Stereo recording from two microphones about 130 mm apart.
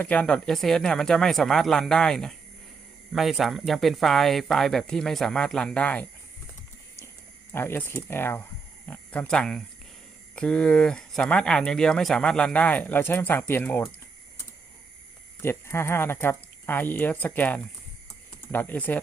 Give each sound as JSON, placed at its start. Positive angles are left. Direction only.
{"t": 0.0, "sound": "speech", "side_deg": 10}
{"t": 7.5, "sound": "speech", "side_deg": 15}
{"t": 15.4, "sound": "speech", "side_deg": 20}